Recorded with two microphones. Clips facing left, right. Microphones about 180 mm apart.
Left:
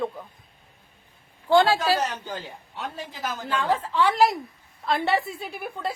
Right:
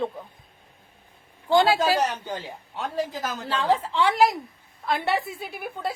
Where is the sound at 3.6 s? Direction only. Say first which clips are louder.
Right 3 dB; 20° right (ahead or behind).